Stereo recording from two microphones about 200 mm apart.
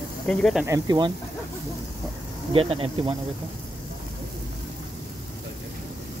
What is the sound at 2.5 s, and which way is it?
Speech, 25° right (ahead or behind).